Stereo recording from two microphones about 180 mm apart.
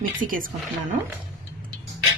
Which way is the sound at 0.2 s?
50° right (ahead or behind).